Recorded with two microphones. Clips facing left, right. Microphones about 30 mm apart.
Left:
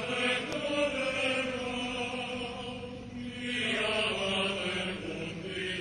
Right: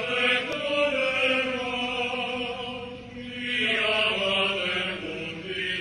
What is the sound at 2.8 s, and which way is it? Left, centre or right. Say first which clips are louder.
Chant: right 3 dB; right.